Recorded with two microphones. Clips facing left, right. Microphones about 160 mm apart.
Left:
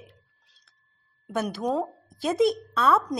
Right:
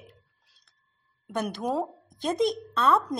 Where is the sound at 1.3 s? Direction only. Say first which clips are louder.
Left 2 dB; 5° left (ahead or behind).